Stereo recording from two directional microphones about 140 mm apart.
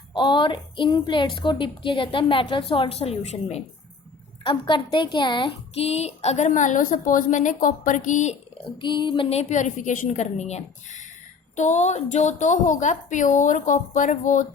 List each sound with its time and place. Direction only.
0.1 s a woman's voice: 35° left (ahead or behind)
4.4 s a woman's voice: 35° left (ahead or behind); by 8.4 s 60° left (ahead or behind)
8.8 s a woman's voice: 35° left (ahead or behind); by 14.4 s 65° left (ahead or behind)